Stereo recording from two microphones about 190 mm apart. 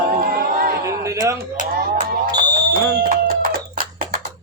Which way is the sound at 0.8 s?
15° right (ahead or behind).